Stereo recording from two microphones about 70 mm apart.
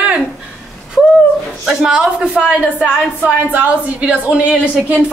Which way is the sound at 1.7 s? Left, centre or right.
Centre.